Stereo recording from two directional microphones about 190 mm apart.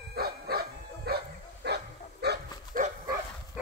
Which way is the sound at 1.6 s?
60° right (ahead or behind).